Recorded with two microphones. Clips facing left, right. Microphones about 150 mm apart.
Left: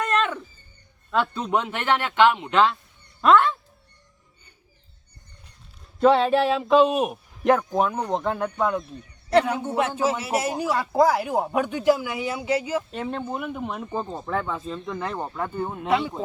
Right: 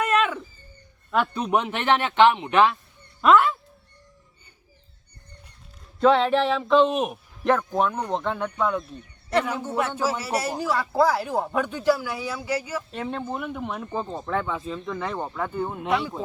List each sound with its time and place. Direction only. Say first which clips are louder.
0.0 s a sound: right 1 dB; 5° right (ahead or behind)
1.1 s speech: right 1 dB; 15° right (ahead or behind)
6.0 s speech: left 1 dB; 10° left (ahead or behind)
7.4 s speech: left 2 dB; 15° left (ahead or behind)
9.3 s a man's voice: left 4 dB; 30° left (ahead or behind)
12.9 s speech: left 1 dB; centre (ahead or behind)